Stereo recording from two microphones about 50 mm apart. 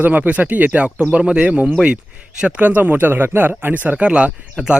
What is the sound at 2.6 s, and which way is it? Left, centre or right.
Speech, right.